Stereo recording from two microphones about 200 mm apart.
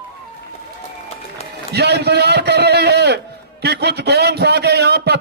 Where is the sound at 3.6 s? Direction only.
55° right (ahead or behind).